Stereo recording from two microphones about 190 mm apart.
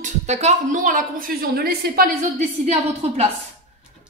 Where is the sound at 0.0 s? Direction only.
35° right (ahead or behind).